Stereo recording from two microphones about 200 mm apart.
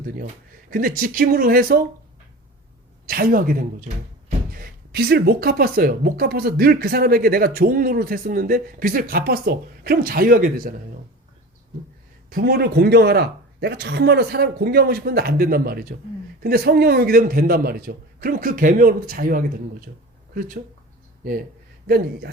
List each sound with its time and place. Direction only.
0.7 s speech: 45° right (ahead or behind)
3.1 s speech: 45° right (ahead or behind)
12.3 s speech: 50° right (ahead or behind)
21.8 s speech: 50° right (ahead or behind)